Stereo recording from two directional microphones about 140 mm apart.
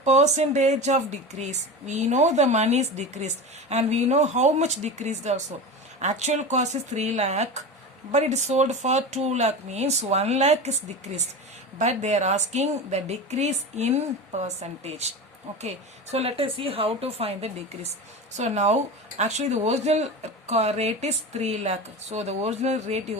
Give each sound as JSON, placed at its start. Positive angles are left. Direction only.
{"t": 0.0, "sound": "a woman's voice", "side_deg": -55}